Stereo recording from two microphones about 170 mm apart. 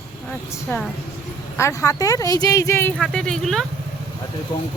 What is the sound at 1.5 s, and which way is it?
Speech, 15° left (ahead or behind).